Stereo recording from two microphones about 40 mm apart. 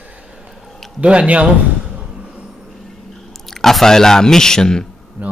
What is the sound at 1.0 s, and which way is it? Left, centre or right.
Speech, right.